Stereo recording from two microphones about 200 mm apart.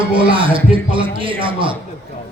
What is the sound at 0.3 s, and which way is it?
A man's voice, 25° right (ahead or behind).